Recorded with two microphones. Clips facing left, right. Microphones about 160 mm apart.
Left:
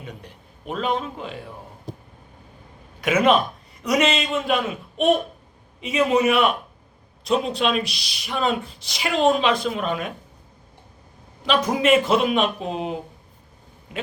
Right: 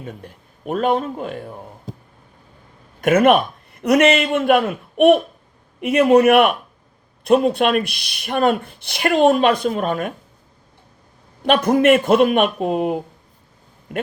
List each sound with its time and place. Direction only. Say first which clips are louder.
0.0 s speech: right 4 dB; 50° right (ahead or behind)
3.0 s a man's voice: right 5 dB; 50° right (ahead or behind)
11.4 s speech: right 5 dB; 55° right (ahead or behind)